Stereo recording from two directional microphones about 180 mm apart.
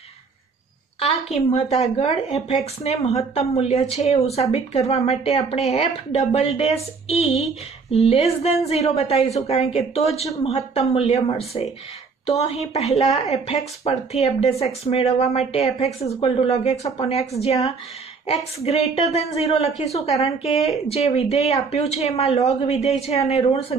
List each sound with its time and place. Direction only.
1.3 s speech: 35° left (ahead or behind)